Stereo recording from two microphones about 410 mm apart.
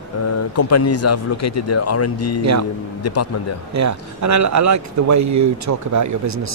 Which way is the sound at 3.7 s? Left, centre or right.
Right.